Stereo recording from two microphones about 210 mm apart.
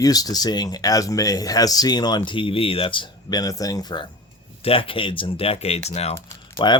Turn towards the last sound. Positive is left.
turn(degrees=15)  # may be behind; listen again after turning